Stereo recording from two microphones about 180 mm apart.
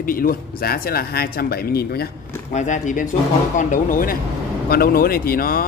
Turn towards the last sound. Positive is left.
turn(degrees=55)  # may be behind; listen again after turning